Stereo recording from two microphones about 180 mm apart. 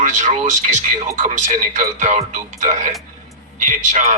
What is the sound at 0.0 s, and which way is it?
Speech, 40° right (ahead or behind).